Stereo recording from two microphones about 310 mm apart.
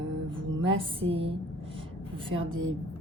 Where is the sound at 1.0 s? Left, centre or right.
Centre.